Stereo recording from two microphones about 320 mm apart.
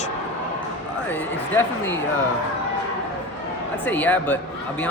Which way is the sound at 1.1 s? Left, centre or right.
Centre.